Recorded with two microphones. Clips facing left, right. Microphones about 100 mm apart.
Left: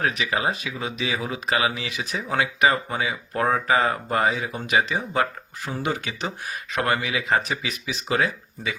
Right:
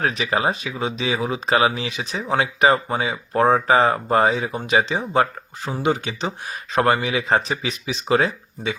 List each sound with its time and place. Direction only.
0.0 s speech: 30° right (ahead or behind)